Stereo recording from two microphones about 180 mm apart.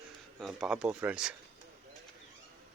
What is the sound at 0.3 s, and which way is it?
Speech, centre (ahead or behind).